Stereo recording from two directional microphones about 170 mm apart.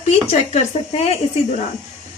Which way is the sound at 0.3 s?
40° left (ahead or behind).